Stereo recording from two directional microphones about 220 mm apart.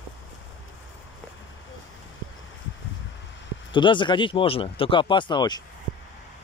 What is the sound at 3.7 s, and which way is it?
Speech, 20° left (ahead or behind).